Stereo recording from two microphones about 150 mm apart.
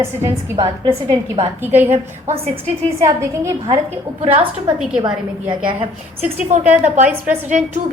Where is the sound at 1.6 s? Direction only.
15° right (ahead or behind).